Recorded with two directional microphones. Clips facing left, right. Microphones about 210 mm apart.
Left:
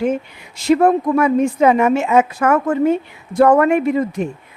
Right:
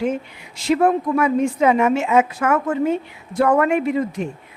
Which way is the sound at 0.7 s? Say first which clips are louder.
Left 4 dB; 45° left (ahead or behind).